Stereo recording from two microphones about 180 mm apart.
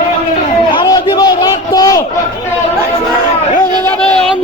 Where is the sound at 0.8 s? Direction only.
20° left (ahead or behind).